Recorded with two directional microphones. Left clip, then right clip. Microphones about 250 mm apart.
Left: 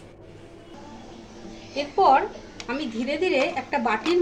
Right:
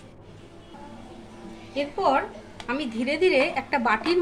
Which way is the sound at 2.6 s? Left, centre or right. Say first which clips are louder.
Right 1 dB; right.